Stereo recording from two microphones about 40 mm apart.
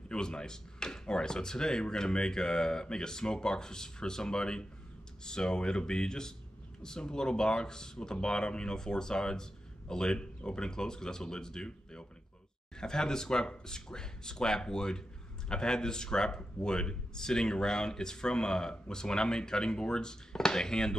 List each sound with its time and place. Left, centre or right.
0.1 s speech: left